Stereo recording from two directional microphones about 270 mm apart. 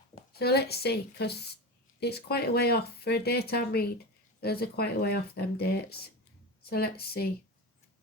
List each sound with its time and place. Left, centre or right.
0.3 s speech: left